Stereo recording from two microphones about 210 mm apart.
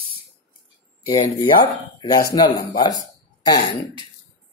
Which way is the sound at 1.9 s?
20° left (ahead or behind).